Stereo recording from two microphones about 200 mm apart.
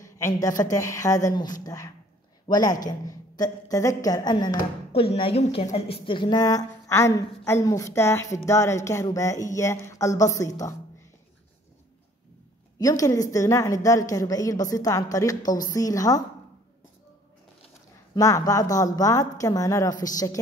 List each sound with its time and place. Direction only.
0.0 s a woman's voice: 15° left (ahead or behind)
12.7 s a woman's voice: 15° left (ahead or behind)
18.1 s a woman's voice: 20° left (ahead or behind)